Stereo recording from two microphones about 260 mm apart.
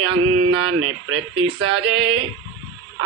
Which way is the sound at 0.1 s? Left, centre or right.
Right.